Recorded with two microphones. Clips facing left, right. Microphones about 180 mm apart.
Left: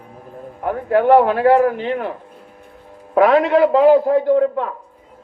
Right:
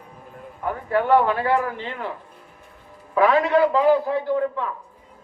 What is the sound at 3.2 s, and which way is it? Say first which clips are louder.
A man's voice: left 4 dB; 60° left (ahead or behind).